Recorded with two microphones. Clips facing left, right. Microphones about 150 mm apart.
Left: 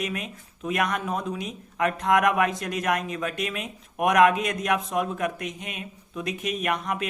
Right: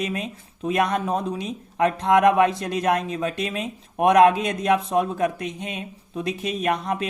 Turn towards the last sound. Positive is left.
turn(degrees=-30)  # may be behind; listen again after turning